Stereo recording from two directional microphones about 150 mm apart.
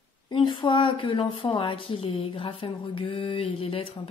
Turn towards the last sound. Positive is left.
turn(degrees=40)  # may be behind; listen again after turning